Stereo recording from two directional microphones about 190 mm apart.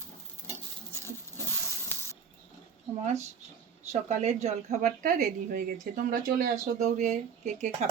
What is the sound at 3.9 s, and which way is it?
A woman's voice, 35° right (ahead or behind).